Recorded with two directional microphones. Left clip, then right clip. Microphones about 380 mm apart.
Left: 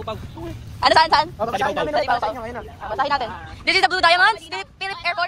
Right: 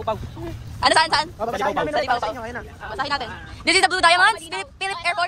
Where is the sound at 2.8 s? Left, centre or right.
Centre.